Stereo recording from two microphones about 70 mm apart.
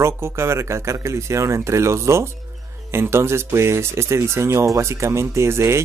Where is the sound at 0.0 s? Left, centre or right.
Right.